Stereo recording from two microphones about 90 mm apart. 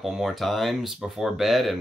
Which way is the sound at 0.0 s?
Centre (ahead or behind).